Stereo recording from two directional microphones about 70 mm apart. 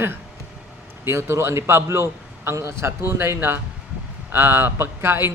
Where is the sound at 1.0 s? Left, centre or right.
Right.